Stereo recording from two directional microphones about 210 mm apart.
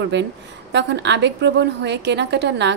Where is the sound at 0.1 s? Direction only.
55° right (ahead or behind).